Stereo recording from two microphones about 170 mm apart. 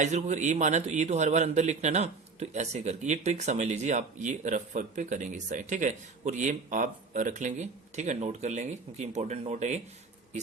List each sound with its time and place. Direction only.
0.0 s a man's voice: 40° right (ahead or behind)